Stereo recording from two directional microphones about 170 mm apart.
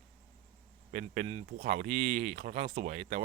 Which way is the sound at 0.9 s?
45° right (ahead or behind).